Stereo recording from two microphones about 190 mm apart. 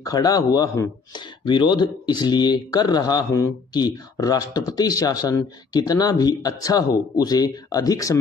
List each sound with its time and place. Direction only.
0.0 s speech: 20° left (ahead or behind)